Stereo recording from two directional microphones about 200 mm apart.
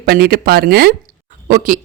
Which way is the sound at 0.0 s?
50° right (ahead or behind).